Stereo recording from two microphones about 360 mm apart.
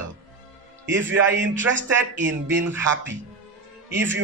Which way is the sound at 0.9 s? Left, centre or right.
Right.